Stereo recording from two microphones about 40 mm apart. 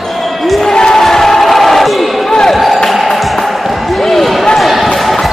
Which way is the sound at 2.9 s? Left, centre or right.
Centre.